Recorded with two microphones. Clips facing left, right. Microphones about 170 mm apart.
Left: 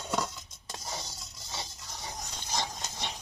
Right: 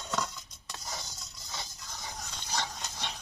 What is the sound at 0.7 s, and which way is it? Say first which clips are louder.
Scrape: left 2 dB; 25° left (ahead or behind).